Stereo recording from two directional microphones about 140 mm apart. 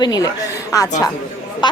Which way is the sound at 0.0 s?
30° left (ahead or behind).